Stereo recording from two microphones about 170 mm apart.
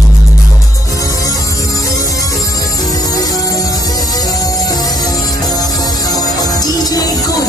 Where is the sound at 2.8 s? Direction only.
20° left (ahead or behind).